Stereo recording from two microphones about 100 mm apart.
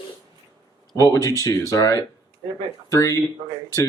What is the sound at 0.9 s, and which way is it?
Speech, 35° left (ahead or behind).